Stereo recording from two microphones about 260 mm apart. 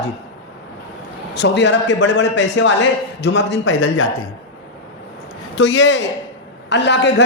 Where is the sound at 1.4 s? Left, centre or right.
Left.